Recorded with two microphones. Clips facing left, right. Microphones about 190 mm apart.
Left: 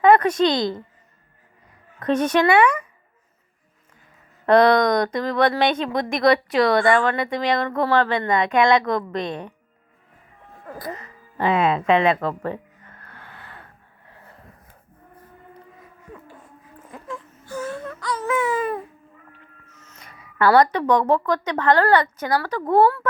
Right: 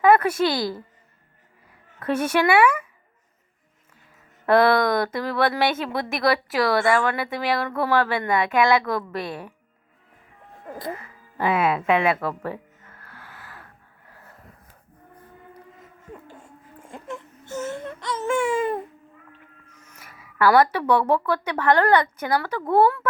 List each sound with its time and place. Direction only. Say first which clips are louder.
0.0 s a woman's voice: left 2 dB; 5° right (ahead or behind)
2.0 s speech: left 3 dB; 10° right (ahead or behind)
4.4 s a woman's voice: left 3 dB; 5° right (ahead or behind)
10.9 s speech: left 1 dB; 10° right (ahead or behind)
12.4 s music: left 3 dB; 10° right (ahead or behind)
15.8 s whimper: right 1 dB; 25° right (ahead or behind)
19.6 s music: left 1 dB; 10° right (ahead or behind)
20.1 s a sound: even; 5° right (ahead or behind)
20.5 s speech: left 2 dB; 10° right (ahead or behind)